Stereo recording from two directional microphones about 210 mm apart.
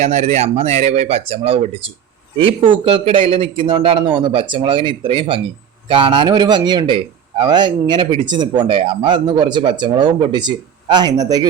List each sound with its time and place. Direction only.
0.0 s a man's voice: 30° right (ahead or behind)